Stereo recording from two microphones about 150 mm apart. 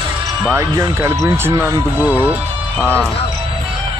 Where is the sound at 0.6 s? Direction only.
20° right (ahead or behind).